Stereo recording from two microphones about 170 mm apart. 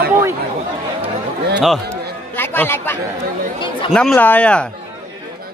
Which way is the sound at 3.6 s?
30° left (ahead or behind).